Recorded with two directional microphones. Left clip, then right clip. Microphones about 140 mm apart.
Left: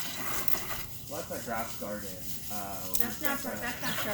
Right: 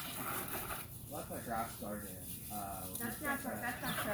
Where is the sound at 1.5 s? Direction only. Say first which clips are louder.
Left 4 dB; 50° left (ahead or behind).